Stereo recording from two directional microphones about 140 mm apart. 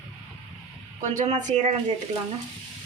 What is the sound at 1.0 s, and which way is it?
Speech, 60° right (ahead or behind).